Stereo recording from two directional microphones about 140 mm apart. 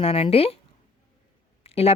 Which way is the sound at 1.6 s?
45° left (ahead or behind).